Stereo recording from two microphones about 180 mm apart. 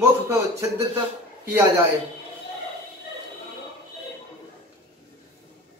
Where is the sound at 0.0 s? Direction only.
15° right (ahead or behind).